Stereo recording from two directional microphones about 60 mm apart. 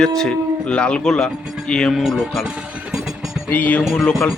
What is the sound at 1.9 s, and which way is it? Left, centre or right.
Speech, centre.